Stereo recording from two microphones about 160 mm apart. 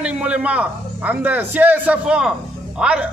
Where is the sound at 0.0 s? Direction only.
5° right (ahead or behind).